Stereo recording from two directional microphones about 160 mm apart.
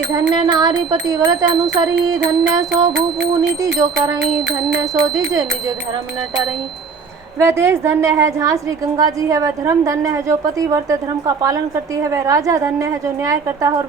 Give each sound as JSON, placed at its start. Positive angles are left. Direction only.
{"t": 0.1, "sound": "wind chime", "side_deg": -25}
{"t": 7.3, "sound": "a woman's voice", "side_deg": -15}
{"t": 9.0, "sound": "wind chime", "side_deg": -20}
{"t": 12.1, "sound": "wind chime", "side_deg": -20}